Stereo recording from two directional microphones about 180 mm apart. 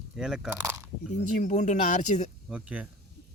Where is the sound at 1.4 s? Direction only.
45° left (ahead or behind).